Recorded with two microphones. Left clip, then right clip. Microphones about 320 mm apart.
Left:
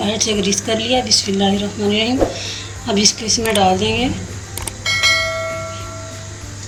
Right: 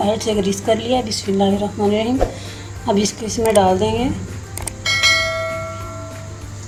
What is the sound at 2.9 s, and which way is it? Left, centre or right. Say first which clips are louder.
A woman's voice: left 3 dB; right.